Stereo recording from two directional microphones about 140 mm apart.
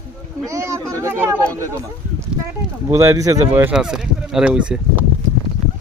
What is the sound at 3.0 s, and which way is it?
Speech, 25° right (ahead or behind).